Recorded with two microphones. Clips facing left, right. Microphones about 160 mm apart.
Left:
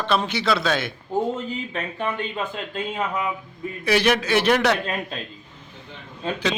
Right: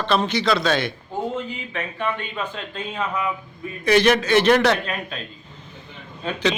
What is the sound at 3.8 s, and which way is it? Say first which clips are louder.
Speech: right 3 dB; 10° left (ahead or behind).